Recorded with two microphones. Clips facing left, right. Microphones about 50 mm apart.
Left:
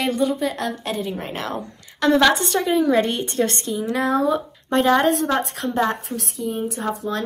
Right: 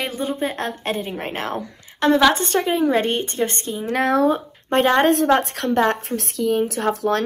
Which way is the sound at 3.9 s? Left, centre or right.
Right.